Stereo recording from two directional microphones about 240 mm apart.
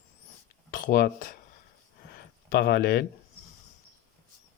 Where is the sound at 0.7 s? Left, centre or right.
Left.